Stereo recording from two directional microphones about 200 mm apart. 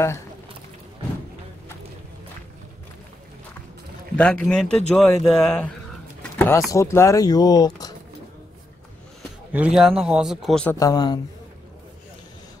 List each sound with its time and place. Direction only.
4.2 s speech: 5° left (ahead or behind)
6.3 s pigeon: 10° left (ahead or behind)
6.7 s speech: 15° left (ahead or behind)
9.5 s speech: 5° right (ahead or behind)
10.8 s a man's voice: 20° left (ahead or behind)